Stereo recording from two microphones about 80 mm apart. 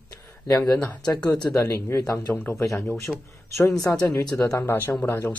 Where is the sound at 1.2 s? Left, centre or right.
Centre.